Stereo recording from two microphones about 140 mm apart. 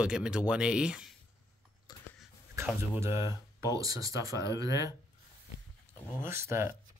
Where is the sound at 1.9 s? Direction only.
30° left (ahead or behind).